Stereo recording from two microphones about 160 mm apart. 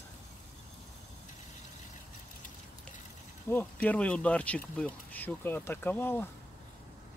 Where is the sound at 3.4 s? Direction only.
10° left (ahead or behind).